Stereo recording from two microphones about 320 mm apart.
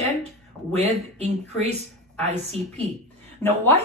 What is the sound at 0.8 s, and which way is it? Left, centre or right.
Speech, centre.